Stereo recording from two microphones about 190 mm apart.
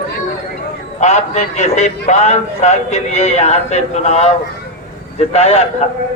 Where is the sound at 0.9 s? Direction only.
35° left (ahead or behind).